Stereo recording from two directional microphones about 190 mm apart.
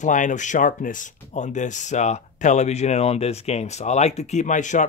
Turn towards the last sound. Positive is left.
turn(degrees=40)  # may be behind; listen again after turning